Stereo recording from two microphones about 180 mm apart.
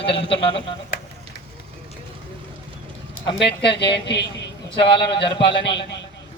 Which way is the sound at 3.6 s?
70° left (ahead or behind).